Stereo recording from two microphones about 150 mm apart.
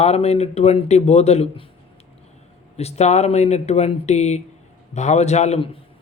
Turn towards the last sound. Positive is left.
turn(degrees=45)  # may be behind; listen again after turning